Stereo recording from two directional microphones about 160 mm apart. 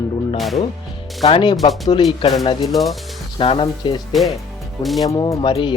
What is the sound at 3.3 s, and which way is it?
Speech, 35° left (ahead or behind).